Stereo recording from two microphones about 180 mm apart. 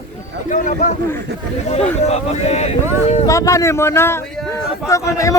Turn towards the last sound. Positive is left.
turn(degrees=15)  # may be behind; listen again after turning